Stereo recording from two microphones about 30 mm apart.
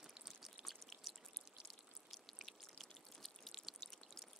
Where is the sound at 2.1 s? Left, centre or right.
Centre.